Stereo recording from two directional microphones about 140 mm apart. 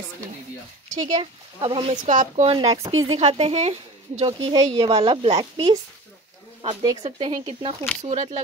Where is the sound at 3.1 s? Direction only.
50° right (ahead or behind).